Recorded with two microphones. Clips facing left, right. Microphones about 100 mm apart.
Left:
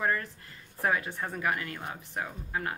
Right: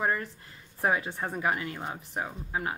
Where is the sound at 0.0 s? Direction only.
20° right (ahead or behind).